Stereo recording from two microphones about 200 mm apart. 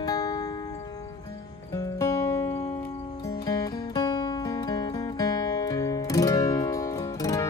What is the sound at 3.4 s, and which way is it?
Music, 20° left (ahead or behind).